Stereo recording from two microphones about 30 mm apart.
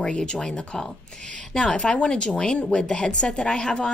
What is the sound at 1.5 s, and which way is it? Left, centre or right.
Speech, left.